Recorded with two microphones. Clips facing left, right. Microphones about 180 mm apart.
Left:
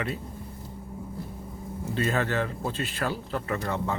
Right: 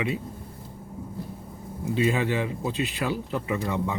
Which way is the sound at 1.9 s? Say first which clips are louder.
Right 3 dB; 15° right (ahead or behind).